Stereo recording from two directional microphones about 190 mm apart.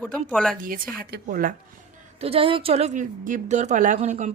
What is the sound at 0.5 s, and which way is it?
Speech, 45° right (ahead or behind).